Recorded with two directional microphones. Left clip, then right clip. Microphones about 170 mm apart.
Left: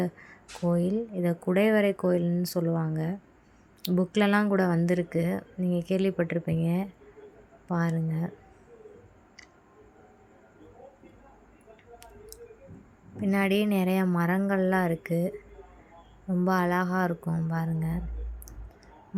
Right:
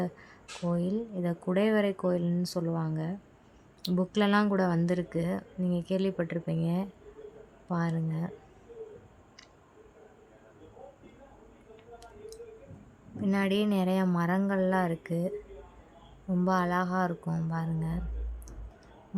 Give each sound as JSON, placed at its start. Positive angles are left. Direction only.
{"t": 0.0, "sound": "speech", "side_deg": 15}
{"t": 13.2, "sound": "speech", "side_deg": 10}
{"t": 16.3, "sound": "speech", "side_deg": 15}